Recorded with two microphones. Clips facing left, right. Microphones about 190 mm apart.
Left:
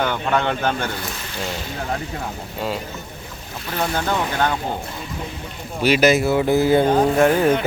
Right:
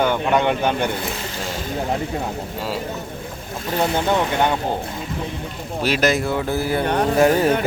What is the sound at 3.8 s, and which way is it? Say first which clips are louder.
Speech: right 3 dB; 20° right (ahead or behind).